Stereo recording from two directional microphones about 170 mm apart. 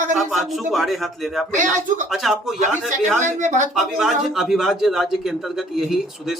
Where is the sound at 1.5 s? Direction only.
45° right (ahead or behind).